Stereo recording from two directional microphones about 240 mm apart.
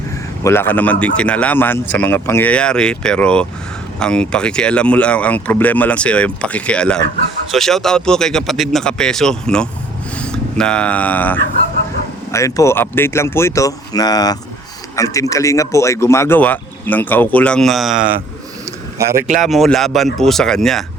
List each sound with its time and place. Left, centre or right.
0.4 s a man's voice: centre
18.9 s speech: right
19.4 s speech: centre